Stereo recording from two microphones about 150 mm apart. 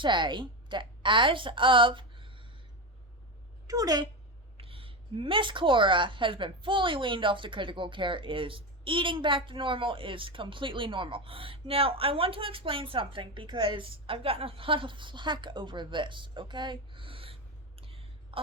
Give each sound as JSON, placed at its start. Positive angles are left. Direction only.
{"t": 0.0, "sound": "a woman's voice", "side_deg": -30}
{"t": 3.7, "sound": "speech", "side_deg": -25}
{"t": 4.5, "sound": "a woman's voice", "side_deg": -40}
{"t": 17.7, "sound": "a sound", "side_deg": -40}